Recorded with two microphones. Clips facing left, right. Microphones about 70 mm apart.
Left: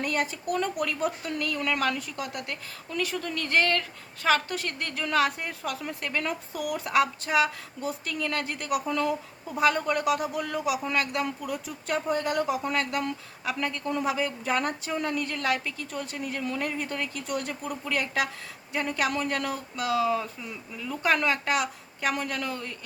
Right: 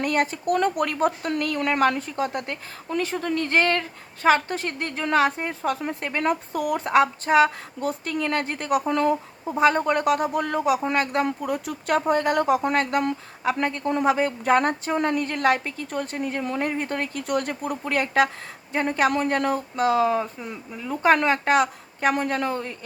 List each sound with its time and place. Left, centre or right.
0.0 s speech: right
6.2 s speech: right
7.8 s speech: right